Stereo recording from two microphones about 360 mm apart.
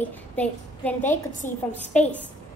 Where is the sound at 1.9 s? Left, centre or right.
Centre.